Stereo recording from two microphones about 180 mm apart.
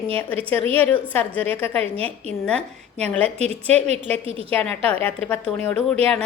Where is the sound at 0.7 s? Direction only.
10° left (ahead or behind).